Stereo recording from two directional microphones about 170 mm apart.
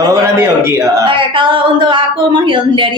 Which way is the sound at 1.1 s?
30° right (ahead or behind).